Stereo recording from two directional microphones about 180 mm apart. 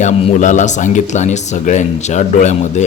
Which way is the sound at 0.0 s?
45° left (ahead or behind).